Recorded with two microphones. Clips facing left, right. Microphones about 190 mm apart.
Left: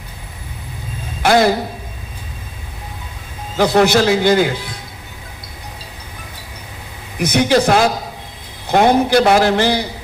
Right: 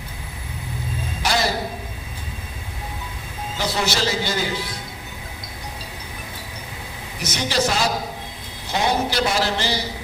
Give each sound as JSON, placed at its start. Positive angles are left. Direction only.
{"t": 1.2, "sound": "a man's voice", "side_deg": 55}
{"t": 3.6, "sound": "a man's voice", "side_deg": 55}
{"t": 7.2, "sound": "a man's voice", "side_deg": 55}